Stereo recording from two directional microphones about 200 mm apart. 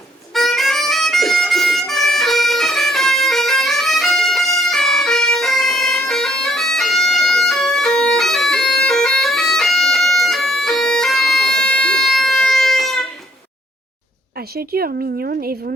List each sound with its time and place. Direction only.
0.3 s harmonica: centre (ahead or behind)
14.3 s a woman's voice: 50° right (ahead or behind)